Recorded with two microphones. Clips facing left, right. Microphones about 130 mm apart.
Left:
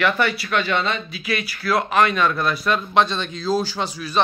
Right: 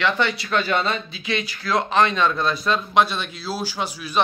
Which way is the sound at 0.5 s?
35° right (ahead or behind).